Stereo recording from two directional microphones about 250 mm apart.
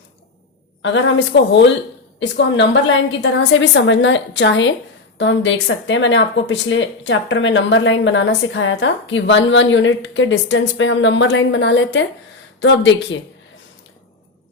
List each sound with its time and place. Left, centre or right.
0.8 s speech: left